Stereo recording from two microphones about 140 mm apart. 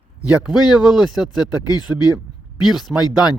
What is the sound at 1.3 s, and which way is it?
Speech, 30° left (ahead or behind).